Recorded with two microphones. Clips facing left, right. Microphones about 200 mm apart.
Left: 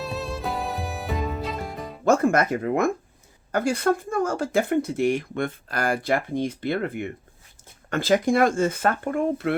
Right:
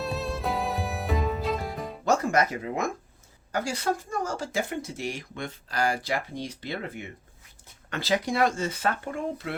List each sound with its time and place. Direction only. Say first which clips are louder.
0.0 s music: even; centre (ahead or behind)
2.0 s speech: left 5 dB; 55° left (ahead or behind)